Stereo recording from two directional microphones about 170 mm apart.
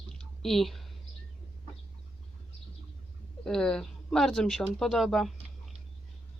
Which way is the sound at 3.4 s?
5° left (ahead or behind).